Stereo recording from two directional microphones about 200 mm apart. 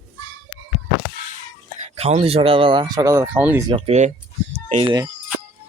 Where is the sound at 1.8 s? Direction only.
30° right (ahead or behind); by 3.6 s 10° right (ahead or behind).